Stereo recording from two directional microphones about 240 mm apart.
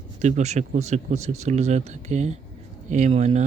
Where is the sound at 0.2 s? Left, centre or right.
Right.